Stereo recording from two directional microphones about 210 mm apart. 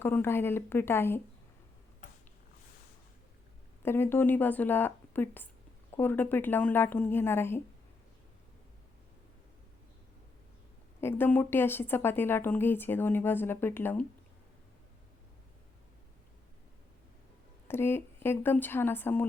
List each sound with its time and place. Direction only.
0.0 s a woman's voice: 10° left (ahead or behind)
3.8 s a woman's voice: 10° left (ahead or behind)
11.0 s a woman's voice: 10° left (ahead or behind)
17.7 s a woman's voice: 10° left (ahead or behind)